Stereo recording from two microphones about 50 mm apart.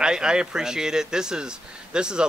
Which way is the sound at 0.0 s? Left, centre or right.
Centre.